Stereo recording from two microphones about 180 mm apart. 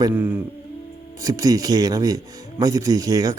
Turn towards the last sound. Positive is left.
turn(degrees=-20)  # may be behind; listen again after turning